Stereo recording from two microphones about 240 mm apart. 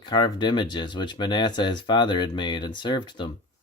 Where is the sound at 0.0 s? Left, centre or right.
Centre.